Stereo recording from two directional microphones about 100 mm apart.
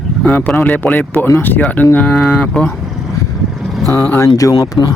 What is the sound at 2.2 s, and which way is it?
Speech, 5° left (ahead or behind).